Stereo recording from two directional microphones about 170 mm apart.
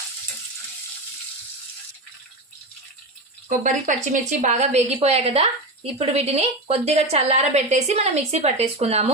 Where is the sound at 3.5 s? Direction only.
45° right (ahead or behind).